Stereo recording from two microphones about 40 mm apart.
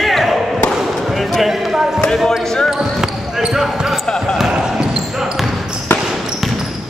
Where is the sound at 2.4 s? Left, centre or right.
Centre.